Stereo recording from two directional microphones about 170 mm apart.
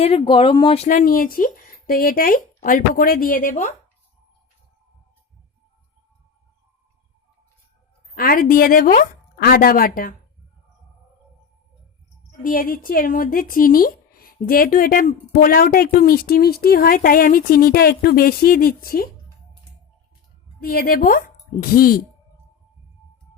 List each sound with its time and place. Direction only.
0.0 s speech: 30° left (ahead or behind)
8.1 s speech: 60° left (ahead or behind)
12.4 s speech: 55° left (ahead or behind)
20.6 s speech: 60° left (ahead or behind)